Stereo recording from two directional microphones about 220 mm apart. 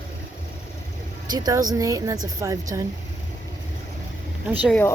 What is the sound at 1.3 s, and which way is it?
A woman's voice, 15° right (ahead or behind).